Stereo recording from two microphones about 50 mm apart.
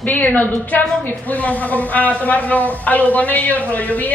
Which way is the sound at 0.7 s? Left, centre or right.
Left.